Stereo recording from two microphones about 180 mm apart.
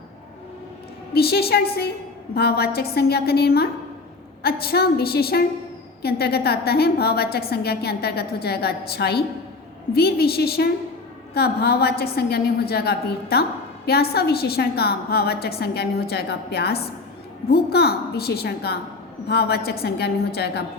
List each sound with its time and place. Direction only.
1.1 s a woman's voice: 60° left (ahead or behind)